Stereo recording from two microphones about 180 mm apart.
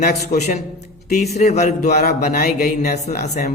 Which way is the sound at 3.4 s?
50° left (ahead or behind).